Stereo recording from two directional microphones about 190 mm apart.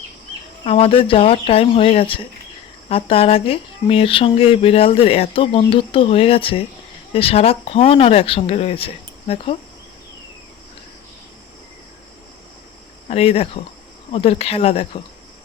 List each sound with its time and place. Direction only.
0.6 s speech: 30° left (ahead or behind)
13.1 s speech: 30° left (ahead or behind)